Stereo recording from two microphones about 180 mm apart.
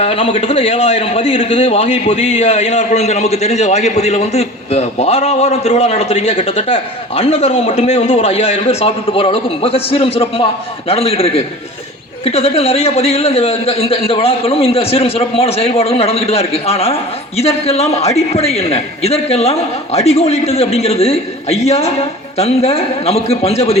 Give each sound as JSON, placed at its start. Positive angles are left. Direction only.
{"t": 0.0, "sound": "a man's voice", "side_deg": 35}